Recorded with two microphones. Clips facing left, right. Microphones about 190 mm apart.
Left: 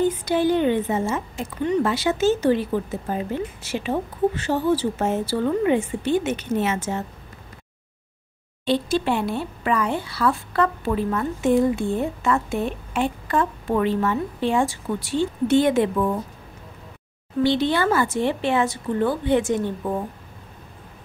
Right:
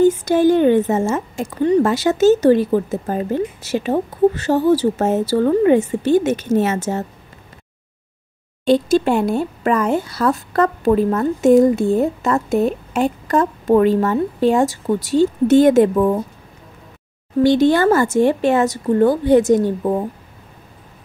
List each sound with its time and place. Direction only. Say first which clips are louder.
0.0 s speech: right 7 dB; 45° right (ahead or behind)
8.6 s speech: right 7 dB; 45° right (ahead or behind)
17.4 s speech: right 7 dB; 45° right (ahead or behind)